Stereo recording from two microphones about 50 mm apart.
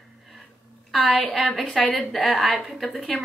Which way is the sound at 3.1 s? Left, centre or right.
Centre.